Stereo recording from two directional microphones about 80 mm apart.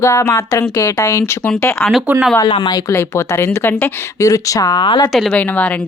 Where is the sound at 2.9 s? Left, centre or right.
Left.